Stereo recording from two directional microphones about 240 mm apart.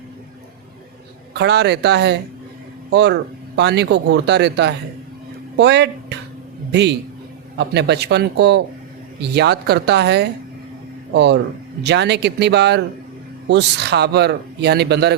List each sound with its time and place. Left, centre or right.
1.3 s a man's voice: right